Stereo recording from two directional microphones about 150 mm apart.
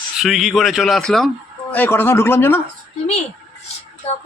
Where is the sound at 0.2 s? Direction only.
Centre (ahead or behind).